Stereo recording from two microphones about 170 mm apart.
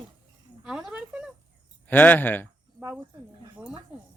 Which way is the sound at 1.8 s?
10° left (ahead or behind).